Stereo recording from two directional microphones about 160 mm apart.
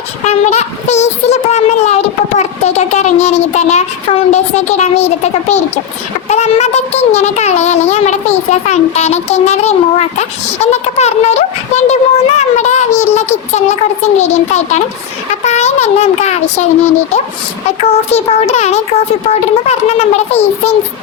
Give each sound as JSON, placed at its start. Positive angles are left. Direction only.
{"t": 0.3, "sound": "speech", "side_deg": 45}
{"t": 17.8, "sound": "speech", "side_deg": 40}